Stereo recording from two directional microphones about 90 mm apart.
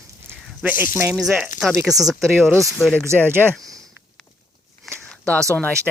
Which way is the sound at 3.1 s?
30° right (ahead or behind).